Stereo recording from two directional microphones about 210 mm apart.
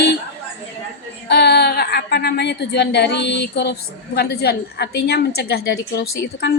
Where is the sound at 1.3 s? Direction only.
50° left (ahead or behind).